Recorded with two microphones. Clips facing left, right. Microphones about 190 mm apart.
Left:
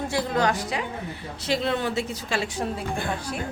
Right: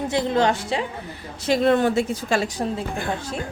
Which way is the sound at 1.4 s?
50° right (ahead or behind).